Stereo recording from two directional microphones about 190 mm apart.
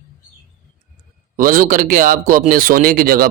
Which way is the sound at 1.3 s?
45° right (ahead or behind).